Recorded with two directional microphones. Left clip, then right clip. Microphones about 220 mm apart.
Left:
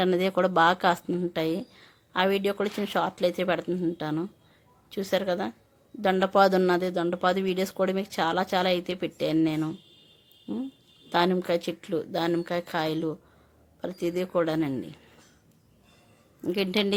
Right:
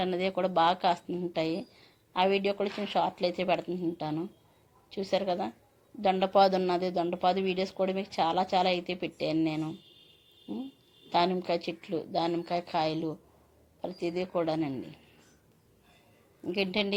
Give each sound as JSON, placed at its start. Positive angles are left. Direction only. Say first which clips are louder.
{"t": 0.0, "sound": "speech", "louder": "left 6 dB", "side_deg": 25}
{"t": 11.1, "sound": "speech", "louder": "left 3 dB", "side_deg": 20}
{"t": 16.5, "sound": "speech", "louder": "left 4 dB", "side_deg": 20}